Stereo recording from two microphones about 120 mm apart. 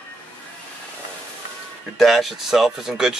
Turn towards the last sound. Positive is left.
turn(degrees=-5)  # may be behind; listen again after turning